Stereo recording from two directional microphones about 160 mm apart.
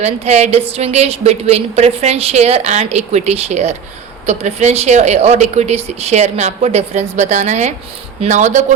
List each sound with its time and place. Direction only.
0.0 s a woman's voice: 40° right (ahead or behind)